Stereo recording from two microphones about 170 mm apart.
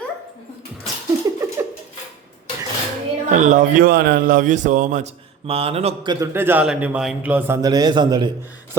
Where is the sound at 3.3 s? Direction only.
50° right (ahead or behind).